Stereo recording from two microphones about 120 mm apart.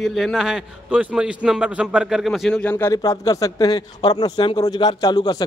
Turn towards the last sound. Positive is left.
turn(degrees=35)  # may be behind; listen again after turning